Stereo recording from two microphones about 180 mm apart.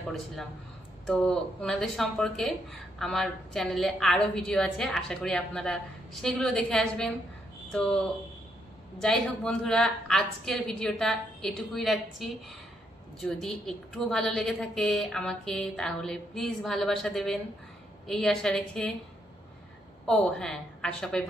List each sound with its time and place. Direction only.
1.0 s a woman's voice: 5° left (ahead or behind)
20.1 s a woman's voice: 5° left (ahead or behind)